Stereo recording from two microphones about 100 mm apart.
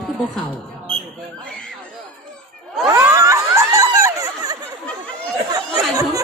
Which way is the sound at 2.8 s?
25° right (ahead or behind).